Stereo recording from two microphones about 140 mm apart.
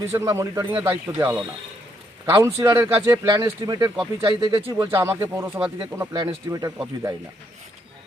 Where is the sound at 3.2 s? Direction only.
25° right (ahead or behind).